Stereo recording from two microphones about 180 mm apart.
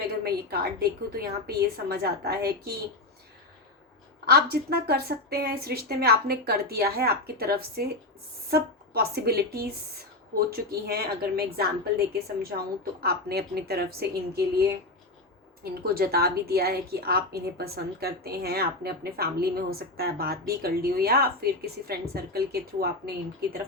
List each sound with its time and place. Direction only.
0.1 s a woman's voice: 60° right (ahead or behind)
4.3 s a woman's voice: 60° right (ahead or behind)
15.6 s a woman's voice: 60° right (ahead or behind)